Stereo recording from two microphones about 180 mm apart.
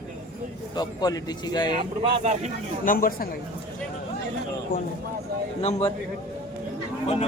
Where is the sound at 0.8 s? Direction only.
20° left (ahead or behind).